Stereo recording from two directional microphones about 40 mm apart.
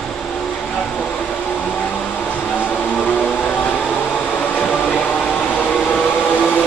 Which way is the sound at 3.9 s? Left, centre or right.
Left.